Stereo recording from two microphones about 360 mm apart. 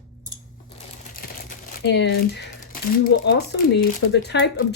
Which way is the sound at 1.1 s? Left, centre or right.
Left.